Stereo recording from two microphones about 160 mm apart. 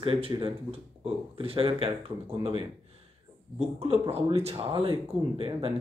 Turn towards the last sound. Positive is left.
turn(degrees=-35)  # may be behind; listen again after turning